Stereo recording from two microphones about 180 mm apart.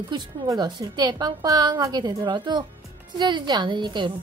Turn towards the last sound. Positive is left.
turn(degrees=-25)  # may be behind; listen again after turning